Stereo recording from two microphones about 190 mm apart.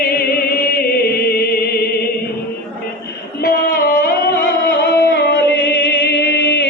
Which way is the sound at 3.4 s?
55° left (ahead or behind).